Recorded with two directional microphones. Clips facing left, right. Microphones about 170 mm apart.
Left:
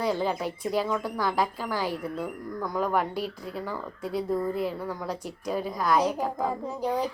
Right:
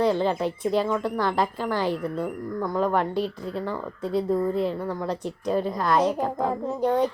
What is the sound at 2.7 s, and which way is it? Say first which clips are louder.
A woman's voice: right 3 dB; 5° left (ahead or behind).